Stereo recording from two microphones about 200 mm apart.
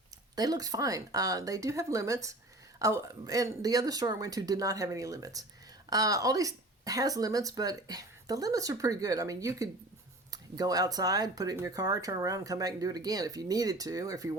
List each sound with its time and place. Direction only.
0.3 s speech: 20° right (ahead or behind)